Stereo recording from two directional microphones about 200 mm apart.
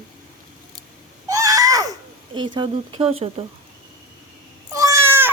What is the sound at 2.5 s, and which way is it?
Speech, 25° right (ahead or behind).